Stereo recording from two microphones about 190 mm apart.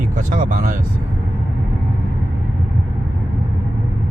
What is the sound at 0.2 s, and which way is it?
Speech, 45° right (ahead or behind).